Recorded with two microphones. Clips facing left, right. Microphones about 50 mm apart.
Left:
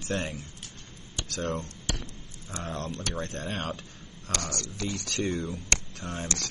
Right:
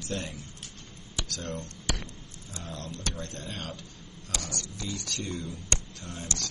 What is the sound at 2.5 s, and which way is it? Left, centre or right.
Speech, left.